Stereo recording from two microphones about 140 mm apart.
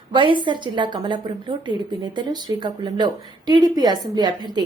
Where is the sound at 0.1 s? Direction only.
35° right (ahead or behind).